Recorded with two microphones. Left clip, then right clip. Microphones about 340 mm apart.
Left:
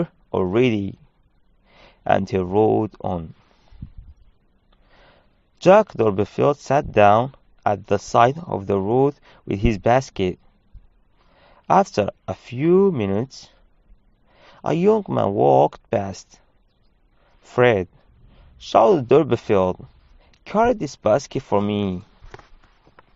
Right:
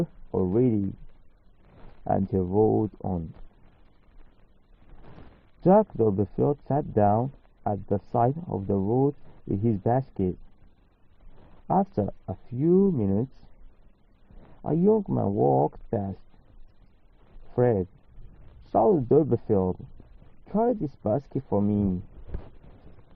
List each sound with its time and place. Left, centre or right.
0.0 s a sound: left
2.0 s speech: left
5.6 s speech: left
11.7 s speech: left
14.6 s speech: left
15.9 s speech: left
17.5 s speech: left